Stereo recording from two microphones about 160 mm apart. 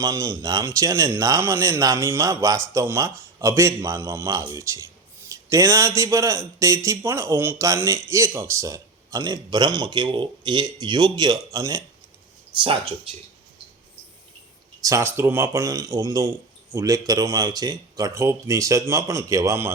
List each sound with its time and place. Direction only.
0.0 s speech: 20° right (ahead or behind)
12.5 s speech: 35° right (ahead or behind)
14.8 s speech: 15° right (ahead or behind)